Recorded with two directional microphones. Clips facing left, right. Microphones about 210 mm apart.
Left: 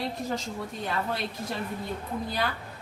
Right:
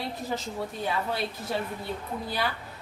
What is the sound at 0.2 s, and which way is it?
Speech, centre (ahead or behind).